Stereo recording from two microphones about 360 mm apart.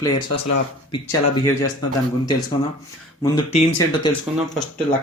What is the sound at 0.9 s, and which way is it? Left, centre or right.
Speech, centre.